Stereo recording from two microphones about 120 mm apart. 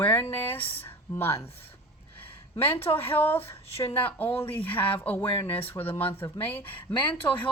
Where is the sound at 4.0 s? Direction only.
15° left (ahead or behind).